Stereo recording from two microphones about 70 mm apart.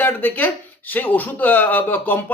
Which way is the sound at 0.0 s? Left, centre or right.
Left.